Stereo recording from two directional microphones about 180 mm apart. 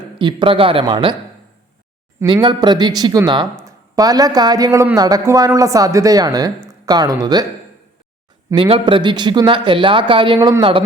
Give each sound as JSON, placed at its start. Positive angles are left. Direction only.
{"t": 0.2, "sound": "speech", "side_deg": -25}
{"t": 2.2, "sound": "speech", "side_deg": -25}
{"t": 8.5, "sound": "speech", "side_deg": -30}